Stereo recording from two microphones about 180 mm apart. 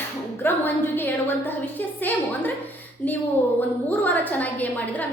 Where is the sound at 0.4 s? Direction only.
10° left (ahead or behind).